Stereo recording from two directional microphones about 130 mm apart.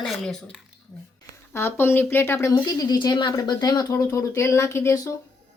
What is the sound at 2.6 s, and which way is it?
Speech, 35° left (ahead or behind).